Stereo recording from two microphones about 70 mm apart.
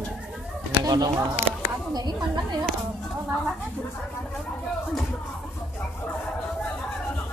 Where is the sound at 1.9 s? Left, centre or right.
Right.